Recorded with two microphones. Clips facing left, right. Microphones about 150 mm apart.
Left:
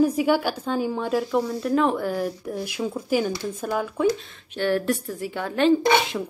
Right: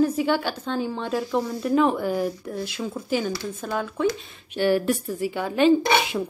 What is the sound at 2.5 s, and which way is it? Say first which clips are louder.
Speech: left 2 dB; 10° left (ahead or behind).